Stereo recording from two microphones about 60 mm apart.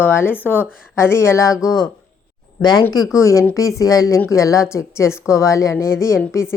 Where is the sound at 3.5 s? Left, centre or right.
Left.